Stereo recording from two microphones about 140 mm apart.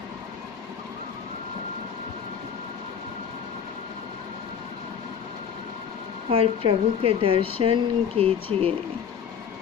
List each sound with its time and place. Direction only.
6.3 s speech: 40° right (ahead or behind)